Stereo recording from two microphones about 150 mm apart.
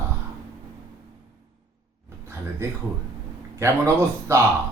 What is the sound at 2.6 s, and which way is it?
Speech, 20° right (ahead or behind).